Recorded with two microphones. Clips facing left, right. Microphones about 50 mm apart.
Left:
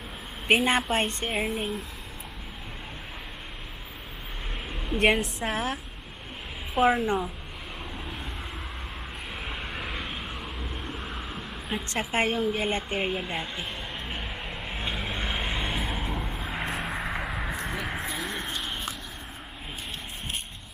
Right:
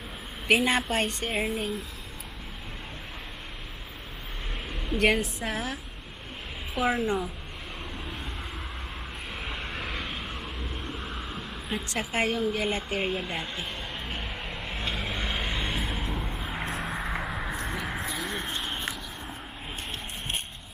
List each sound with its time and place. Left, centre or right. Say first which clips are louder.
0.4 s a woman's voice: left 1 dB; left
1.2 s speech: even; centre
4.7 s a sound: even; centre
5.5 s a woman's voice: left 3 dB; left
6.8 s a woman's voice: left 4 dB; centre
7.9 s vehicle: even; centre
9.3 s vehicle: even; centre
11.9 s a sound: left 2 dB; left; by 18.9 s centre